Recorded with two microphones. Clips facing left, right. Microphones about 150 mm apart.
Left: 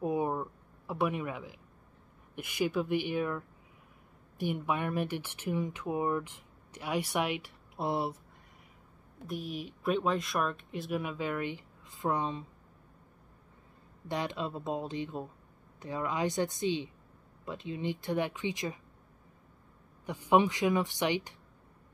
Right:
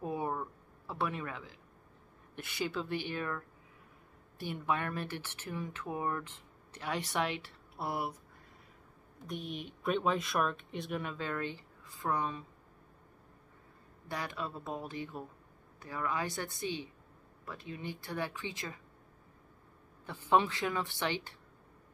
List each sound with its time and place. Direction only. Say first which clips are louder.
0.0 s a sound: left 5 dB; 15° left (ahead or behind)
2.3 s speech: left 6 dB; 15° left (ahead or behind)
9.3 s speech: left 3 dB; 5° left (ahead or behind); by 12.4 s 20° left (ahead or behind)
14.0 s speech: left 5 dB; 20° left (ahead or behind)
20.1 s speech: left 3 dB; 15° left (ahead or behind)